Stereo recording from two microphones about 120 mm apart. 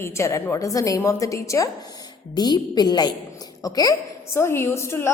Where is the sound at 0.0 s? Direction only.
25° left (ahead or behind).